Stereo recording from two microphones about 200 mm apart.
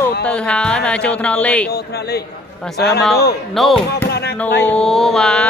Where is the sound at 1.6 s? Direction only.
55° left (ahead or behind).